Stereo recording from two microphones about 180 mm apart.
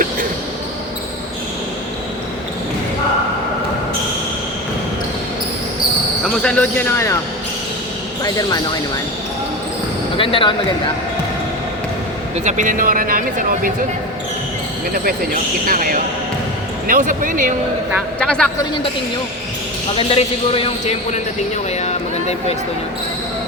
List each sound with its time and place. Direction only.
6.2 s speech: 5° left (ahead or behind)
10.2 s speech: 30° left (ahead or behind)
12.5 s speech: 45° right (ahead or behind)
14.9 s speech: 50° right (ahead or behind)
18.2 s a man's voice: 5° left (ahead or behind)
20.0 s speech: 30° left (ahead or behind)
21.8 s speech: 35° left (ahead or behind)